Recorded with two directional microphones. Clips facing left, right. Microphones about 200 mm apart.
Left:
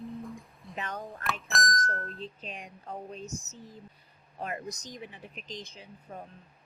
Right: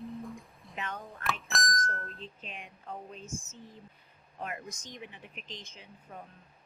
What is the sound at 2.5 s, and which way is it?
Speech, 40° left (ahead or behind).